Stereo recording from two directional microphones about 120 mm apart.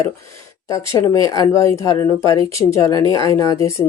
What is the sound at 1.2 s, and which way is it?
Speech, 30° left (ahead or behind).